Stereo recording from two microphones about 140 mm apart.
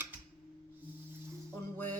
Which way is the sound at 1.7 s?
15° left (ahead or behind).